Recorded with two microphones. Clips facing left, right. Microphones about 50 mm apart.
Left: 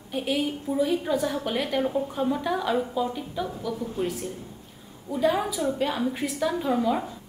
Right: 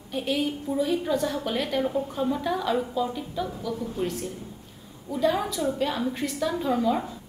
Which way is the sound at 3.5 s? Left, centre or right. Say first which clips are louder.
Even; centre.